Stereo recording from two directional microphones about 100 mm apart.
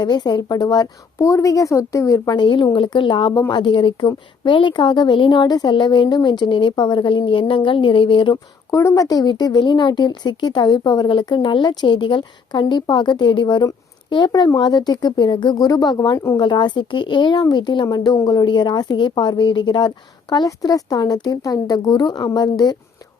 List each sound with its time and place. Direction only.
0.0 s a woman's voice: 50° left (ahead or behind)
1.2 s a woman's voice: 30° left (ahead or behind)
2.4 s a woman's voice: 55° left (ahead or behind)
8.7 s a woman's voice: 30° left (ahead or behind)
9.0 s a woman's voice: 40° left (ahead or behind)
16.1 s a woman's voice: 25° left (ahead or behind)
16.4 s a woman's voice: 50° left (ahead or behind)